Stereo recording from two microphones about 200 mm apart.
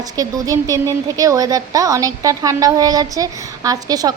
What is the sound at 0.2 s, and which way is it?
A woman's voice, 15° right (ahead or behind).